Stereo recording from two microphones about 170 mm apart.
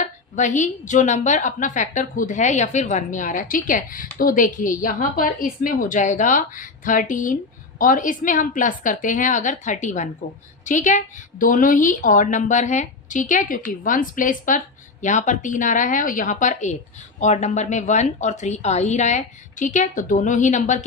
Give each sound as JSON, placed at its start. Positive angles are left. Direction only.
{"t": 0.0, "sound": "a woman's voice", "side_deg": 45}